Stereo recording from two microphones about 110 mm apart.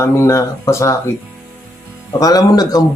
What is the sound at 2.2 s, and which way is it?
Mantra, 35° left (ahead or behind).